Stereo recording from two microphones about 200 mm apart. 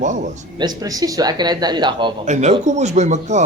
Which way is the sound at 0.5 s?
20° right (ahead or behind).